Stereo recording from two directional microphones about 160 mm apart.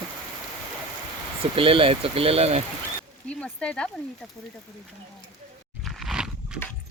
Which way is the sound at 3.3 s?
5° left (ahead or behind).